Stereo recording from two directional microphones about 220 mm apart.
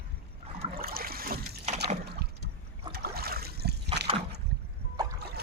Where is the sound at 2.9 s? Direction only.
45° right (ahead or behind).